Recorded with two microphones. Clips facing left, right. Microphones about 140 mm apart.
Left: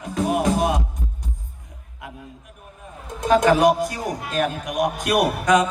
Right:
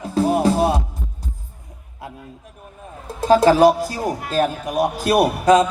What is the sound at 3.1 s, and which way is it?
Speech, 30° right (ahead or behind).